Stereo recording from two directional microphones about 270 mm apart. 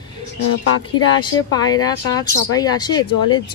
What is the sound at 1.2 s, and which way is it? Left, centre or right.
Speech, centre.